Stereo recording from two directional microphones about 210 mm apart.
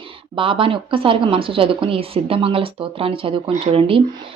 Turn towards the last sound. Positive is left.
turn(degrees=-25)  # may be behind; listen again after turning